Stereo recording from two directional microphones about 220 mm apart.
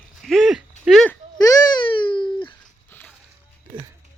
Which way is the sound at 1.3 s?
15° left (ahead or behind).